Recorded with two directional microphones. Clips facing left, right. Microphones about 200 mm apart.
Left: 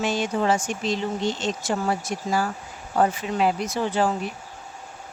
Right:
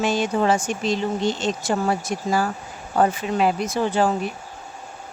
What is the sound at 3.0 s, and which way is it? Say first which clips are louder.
Speech: right 2 dB; 60° right (ahead or behind).